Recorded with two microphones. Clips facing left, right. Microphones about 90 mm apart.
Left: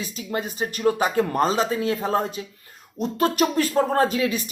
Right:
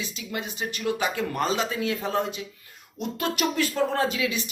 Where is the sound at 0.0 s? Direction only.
40° left (ahead or behind).